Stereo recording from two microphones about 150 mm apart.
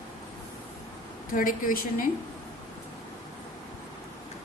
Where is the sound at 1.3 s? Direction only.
65° left (ahead or behind).